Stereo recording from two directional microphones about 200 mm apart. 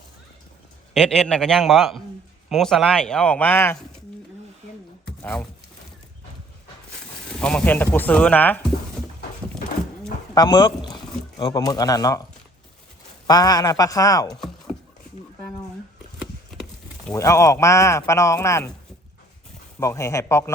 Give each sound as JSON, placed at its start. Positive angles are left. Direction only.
{"t": 0.9, "sound": "speech", "side_deg": 5}
{"t": 5.0, "sound": "a sound", "side_deg": 5}
{"t": 7.3, "sound": "speech", "side_deg": 5}
{"t": 10.3, "sound": "speech", "side_deg": 20}
{"t": 13.2, "sound": "speech", "side_deg": 20}
{"t": 17.2, "sound": "speech", "side_deg": 15}
{"t": 19.8, "sound": "speech", "side_deg": 15}